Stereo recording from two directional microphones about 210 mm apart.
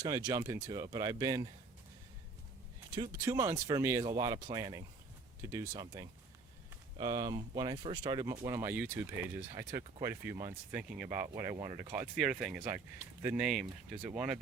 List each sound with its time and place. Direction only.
0.0 s speech: 20° right (ahead or behind)
2.9 s speech: 20° right (ahead or behind)
11.9 s speech: 5° right (ahead or behind)